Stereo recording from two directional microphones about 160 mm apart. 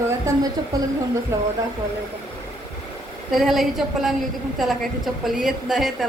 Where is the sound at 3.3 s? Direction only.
Centre (ahead or behind).